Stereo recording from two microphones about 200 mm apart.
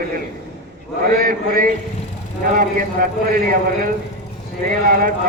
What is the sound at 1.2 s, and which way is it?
A man's voice, 45° right (ahead or behind).